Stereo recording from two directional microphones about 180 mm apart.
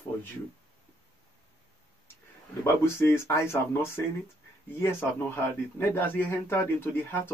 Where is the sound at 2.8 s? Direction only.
15° left (ahead or behind).